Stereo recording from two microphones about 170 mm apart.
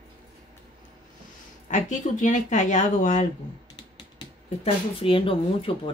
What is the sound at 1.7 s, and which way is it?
Speech, 45° left (ahead or behind).